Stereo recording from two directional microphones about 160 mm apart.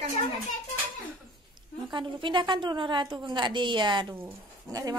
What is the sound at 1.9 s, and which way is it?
A woman's voice, 30° right (ahead or behind).